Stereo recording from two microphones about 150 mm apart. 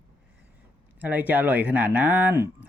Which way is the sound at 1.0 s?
10° right (ahead or behind).